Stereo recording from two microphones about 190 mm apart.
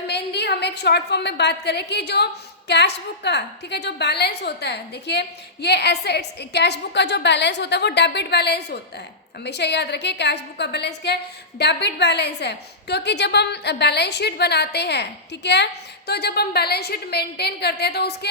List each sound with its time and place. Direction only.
0.1 s a woman's voice: 65° left (ahead or behind)